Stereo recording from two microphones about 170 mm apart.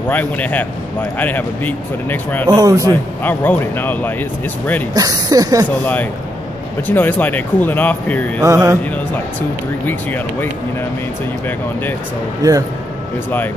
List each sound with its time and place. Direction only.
0.1 s speech: 10° left (ahead or behind)
2.4 s speech: 20° right (ahead or behind)
2.8 s speech: 10° left (ahead or behind)
4.9 s speech: 20° right (ahead or behind)
6.9 s speech: 10° left (ahead or behind)
8.4 s music: 20° right (ahead or behind)
9.8 s speech: 10° left (ahead or behind)
12.4 s speech: 20° right (ahead or behind)